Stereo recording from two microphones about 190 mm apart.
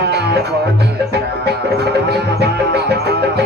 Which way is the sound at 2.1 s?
60° right (ahead or behind).